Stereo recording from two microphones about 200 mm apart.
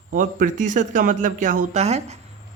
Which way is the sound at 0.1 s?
40° right (ahead or behind).